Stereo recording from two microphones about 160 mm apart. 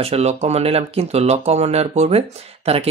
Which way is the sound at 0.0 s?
40° right (ahead or behind).